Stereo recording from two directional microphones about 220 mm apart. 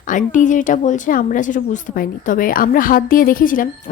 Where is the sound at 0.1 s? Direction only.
35° left (ahead or behind).